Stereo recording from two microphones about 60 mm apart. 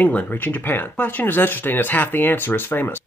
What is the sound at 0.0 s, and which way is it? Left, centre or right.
Speech, left.